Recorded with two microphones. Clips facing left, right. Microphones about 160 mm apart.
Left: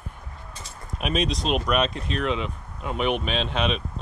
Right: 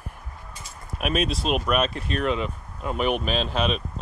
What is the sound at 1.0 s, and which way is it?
Speech, 5° right (ahead or behind).